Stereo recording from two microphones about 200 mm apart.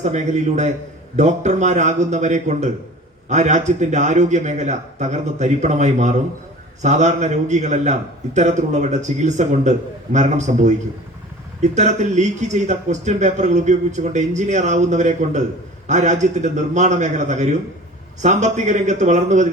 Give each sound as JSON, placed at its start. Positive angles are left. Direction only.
{"t": 0.0, "sound": "a man's voice", "side_deg": -35}